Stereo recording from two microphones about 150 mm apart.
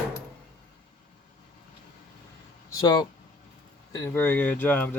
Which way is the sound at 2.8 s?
25° left (ahead or behind).